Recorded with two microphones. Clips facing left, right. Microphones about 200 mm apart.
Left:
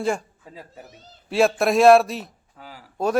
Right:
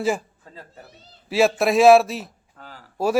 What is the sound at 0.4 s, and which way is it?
Speech, 10° left (ahead or behind).